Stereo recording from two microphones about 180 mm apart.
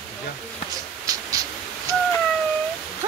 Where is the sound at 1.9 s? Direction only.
20° right (ahead or behind).